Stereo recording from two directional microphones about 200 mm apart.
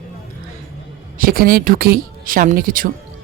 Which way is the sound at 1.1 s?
45° right (ahead or behind).